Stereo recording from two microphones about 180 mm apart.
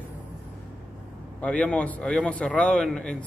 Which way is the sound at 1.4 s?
5° left (ahead or behind).